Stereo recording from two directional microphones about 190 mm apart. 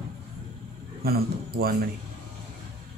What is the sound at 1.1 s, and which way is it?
Speech, 55° right (ahead or behind).